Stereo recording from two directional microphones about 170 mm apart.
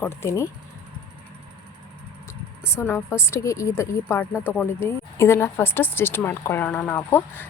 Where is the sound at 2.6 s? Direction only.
15° left (ahead or behind).